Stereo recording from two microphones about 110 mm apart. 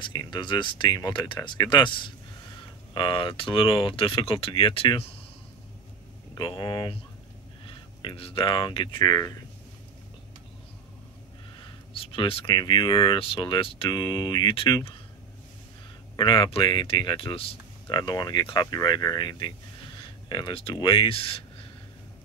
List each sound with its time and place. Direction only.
0.0 s speech: 40° left (ahead or behind)
6.3 s speech: 45° left (ahead or behind)
9.1 s speech: 30° left (ahead or behind)
11.6 s speech: 55° left (ahead or behind)
16.2 s speech: 50° left (ahead or behind)